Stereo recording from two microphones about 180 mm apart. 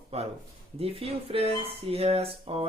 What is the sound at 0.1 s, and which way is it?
Speech, 35° right (ahead or behind).